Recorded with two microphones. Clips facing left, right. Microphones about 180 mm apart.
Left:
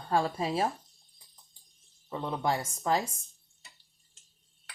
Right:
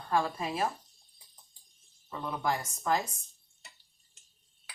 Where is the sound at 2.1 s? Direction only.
25° left (ahead or behind).